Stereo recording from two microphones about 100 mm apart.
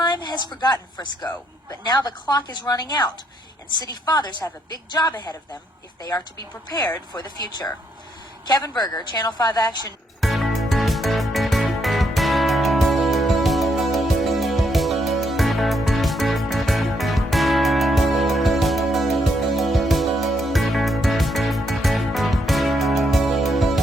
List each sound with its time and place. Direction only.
0.0 s a woman's voice: 45° left (ahead or behind)
10.2 s music: centre (ahead or behind)